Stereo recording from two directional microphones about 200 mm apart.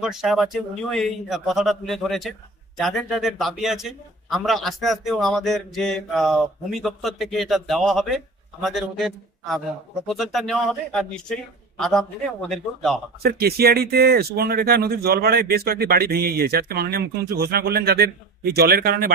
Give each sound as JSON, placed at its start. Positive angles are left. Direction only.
{"t": 0.0, "sound": "a man's voice", "side_deg": 0}
{"t": 13.2, "sound": "speech", "side_deg": -50}